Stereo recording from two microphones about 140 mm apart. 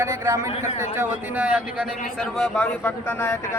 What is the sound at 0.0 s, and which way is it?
A man's voice, 20° right (ahead or behind).